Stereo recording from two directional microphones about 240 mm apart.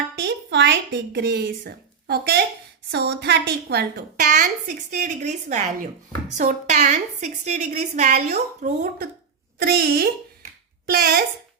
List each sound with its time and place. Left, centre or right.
0.2 s a woman's voice: right